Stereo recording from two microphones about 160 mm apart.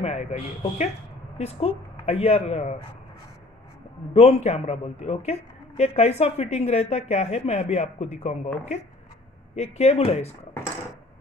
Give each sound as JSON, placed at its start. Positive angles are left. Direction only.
{"t": 0.0, "sound": "a woman's voice", "side_deg": 40}
{"t": 4.1, "sound": "a woman's voice", "side_deg": 40}